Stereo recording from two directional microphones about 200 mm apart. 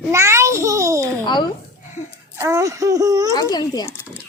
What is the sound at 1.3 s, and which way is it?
Speech, 20° left (ahead or behind).